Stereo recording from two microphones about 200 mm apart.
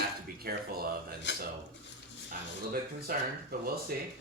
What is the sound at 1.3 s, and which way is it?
Speech, 65° left (ahead or behind).